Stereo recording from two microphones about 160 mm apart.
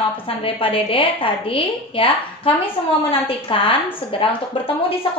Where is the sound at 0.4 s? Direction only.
35° left (ahead or behind).